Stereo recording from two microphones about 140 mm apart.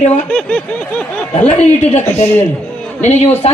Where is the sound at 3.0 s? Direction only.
55° left (ahead or behind).